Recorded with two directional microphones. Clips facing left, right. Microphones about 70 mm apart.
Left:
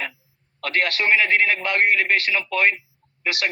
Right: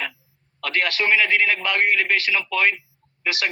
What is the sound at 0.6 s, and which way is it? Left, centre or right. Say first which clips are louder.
A man's voice: even; left.